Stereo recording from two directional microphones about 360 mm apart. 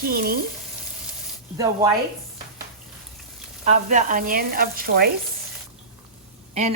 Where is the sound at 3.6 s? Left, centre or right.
Centre.